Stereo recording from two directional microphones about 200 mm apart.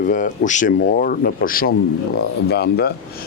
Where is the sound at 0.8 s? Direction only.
50° left (ahead or behind).